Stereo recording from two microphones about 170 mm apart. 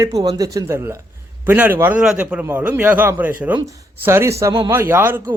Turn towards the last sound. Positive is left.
turn(degrees=-15)  # may be behind; listen again after turning